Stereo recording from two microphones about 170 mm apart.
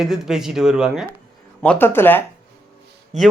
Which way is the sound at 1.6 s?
10° left (ahead or behind).